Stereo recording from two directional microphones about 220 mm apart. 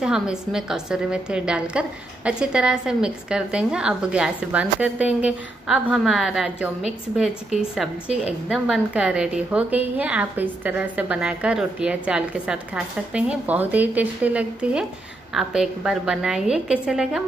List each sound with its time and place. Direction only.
0.0 s a woman's voice: 5° right (ahead or behind)
8.1 s a woman's voice: 30° left (ahead or behind)
8.5 s a woman's voice: centre (ahead or behind)